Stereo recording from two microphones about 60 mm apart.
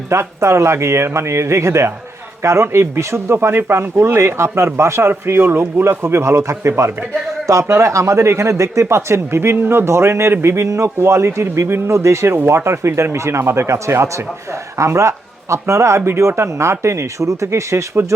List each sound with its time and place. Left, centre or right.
0.1 s speech: right